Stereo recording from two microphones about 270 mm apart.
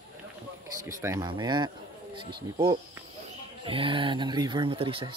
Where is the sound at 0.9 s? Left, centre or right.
Centre.